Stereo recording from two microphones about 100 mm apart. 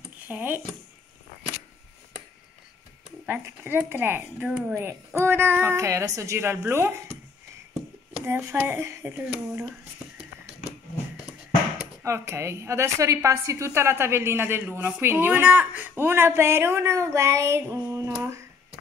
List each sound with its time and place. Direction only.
0.3 s speech: 15° right (ahead or behind)
3.3 s a woman's voice: 20° right (ahead or behind)
4.5 s speech: 5° right (ahead or behind)
4.7 s a woman's voice: 25° right (ahead or behind)
8.3 s a woman's voice: 25° right (ahead or behind)
12.0 s a woman's voice: 25° right (ahead or behind)